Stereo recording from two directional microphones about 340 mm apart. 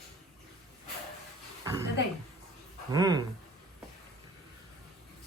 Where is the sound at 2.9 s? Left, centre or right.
Centre.